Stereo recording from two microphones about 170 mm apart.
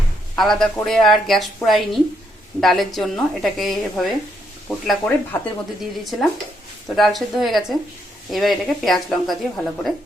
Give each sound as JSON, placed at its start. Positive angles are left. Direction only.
{"t": 0.3, "sound": "a woman's voice", "side_deg": 0}
{"t": 6.8, "sound": "a woman's voice", "side_deg": 0}